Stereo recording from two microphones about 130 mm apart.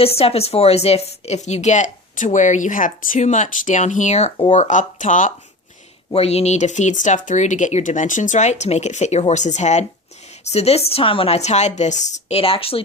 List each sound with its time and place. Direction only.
0.0 s speech: 50° left (ahead or behind); by 5.3 s 75° left (ahead or behind)
6.1 s speech: 55° left (ahead or behind)
12.4 s speech: 45° left (ahead or behind)